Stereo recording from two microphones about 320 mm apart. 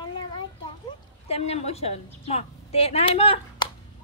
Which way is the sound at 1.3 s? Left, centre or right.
Centre.